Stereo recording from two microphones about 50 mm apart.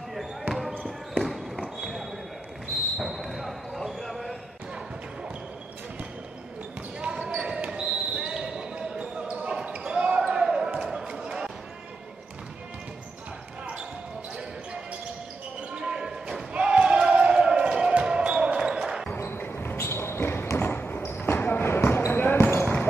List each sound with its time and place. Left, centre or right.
0.1 s basketball bounce: centre
3.1 s basketball bounce: centre
7.0 s basketball bounce: right
11.1 s a sound: centre
15.7 s basketball bounce: centre
19.1 s basketball bounce: left
19.9 s a sound: left
20.5 s basketball bounce: left